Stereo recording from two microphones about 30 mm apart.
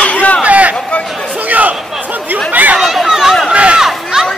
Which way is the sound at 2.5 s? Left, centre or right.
Right.